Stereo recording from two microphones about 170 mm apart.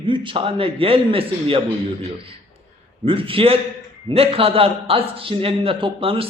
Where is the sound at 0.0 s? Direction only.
30° right (ahead or behind).